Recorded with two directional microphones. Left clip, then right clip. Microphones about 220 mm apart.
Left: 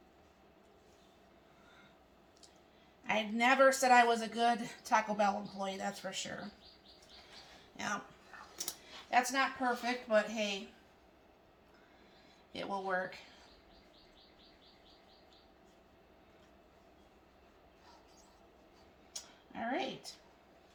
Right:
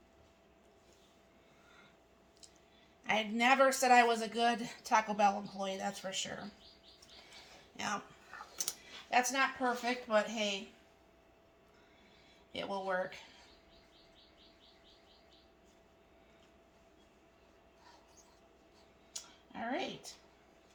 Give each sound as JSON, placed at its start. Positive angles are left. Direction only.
{"t": 3.0, "sound": "speech", "side_deg": -25}
{"t": 7.8, "sound": "dog", "side_deg": -25}
{"t": 9.0, "sound": "speech", "side_deg": -25}
{"t": 12.5, "sound": "speech", "side_deg": -20}
{"t": 19.1, "sound": "a sound", "side_deg": -15}